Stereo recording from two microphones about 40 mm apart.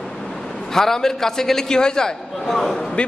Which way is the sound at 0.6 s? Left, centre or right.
Centre.